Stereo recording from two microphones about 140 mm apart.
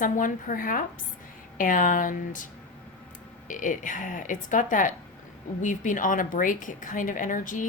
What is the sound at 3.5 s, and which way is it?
A woman's voice, 70° left (ahead or behind).